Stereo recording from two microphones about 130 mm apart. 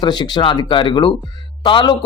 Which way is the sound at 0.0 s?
35° left (ahead or behind).